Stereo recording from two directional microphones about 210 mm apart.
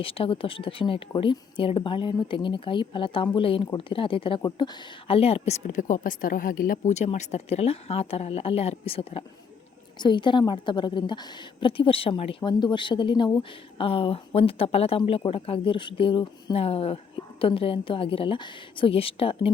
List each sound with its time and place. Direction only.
0.0 s speech: 25° left (ahead or behind)